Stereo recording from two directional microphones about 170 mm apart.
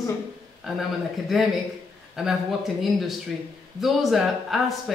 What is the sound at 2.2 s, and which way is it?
Speech, centre (ahead or behind).